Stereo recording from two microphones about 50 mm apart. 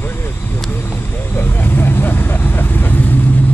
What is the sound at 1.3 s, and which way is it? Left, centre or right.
Vehicle, left.